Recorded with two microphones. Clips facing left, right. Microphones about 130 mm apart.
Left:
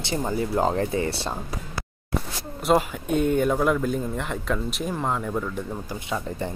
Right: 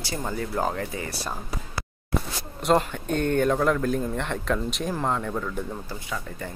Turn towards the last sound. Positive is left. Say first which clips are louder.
# even
turn(degrees=0)  # may be behind; listen again after turning